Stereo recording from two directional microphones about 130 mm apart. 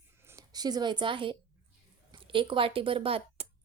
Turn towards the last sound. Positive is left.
turn(degrees=-45)  # may be behind; listen again after turning